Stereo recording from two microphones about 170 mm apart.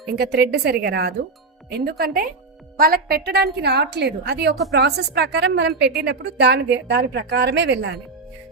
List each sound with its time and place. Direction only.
0.2 s a woman's voice: 70° right (ahead or behind); by 7.9 s 90° right